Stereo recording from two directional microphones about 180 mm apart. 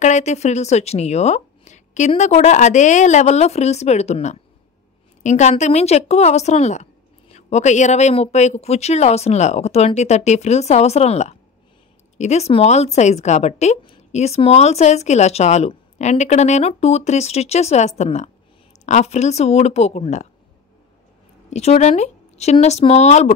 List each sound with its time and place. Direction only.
0.0 s a woman's voice: 40° left (ahead or behind)
21.5 s a woman's voice: 35° left (ahead or behind)